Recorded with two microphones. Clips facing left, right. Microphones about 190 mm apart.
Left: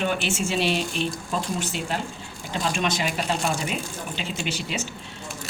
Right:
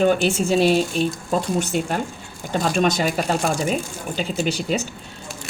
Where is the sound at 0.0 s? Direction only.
40° right (ahead or behind).